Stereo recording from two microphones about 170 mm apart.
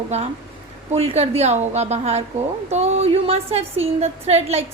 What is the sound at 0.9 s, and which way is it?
A woman's voice, 35° right (ahead or behind).